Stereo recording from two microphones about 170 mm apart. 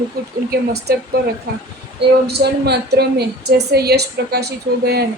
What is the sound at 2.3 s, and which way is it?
A woman's voice, 75° right (ahead or behind).